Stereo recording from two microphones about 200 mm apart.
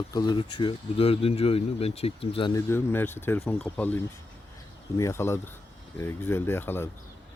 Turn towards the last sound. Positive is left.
turn(degrees=10)  # may be behind; listen again after turning